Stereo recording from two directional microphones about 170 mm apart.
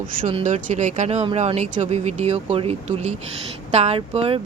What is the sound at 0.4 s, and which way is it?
Speech, 50° right (ahead or behind).